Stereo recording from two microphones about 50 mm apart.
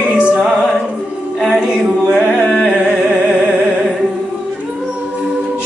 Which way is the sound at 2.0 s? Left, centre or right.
Centre.